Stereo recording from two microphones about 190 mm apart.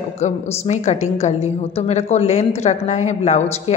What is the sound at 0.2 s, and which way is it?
A woman's voice, 35° left (ahead or behind).